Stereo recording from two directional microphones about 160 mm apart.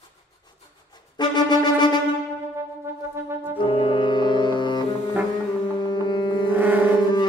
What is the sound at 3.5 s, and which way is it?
Brass instrument, 30° left (ahead or behind).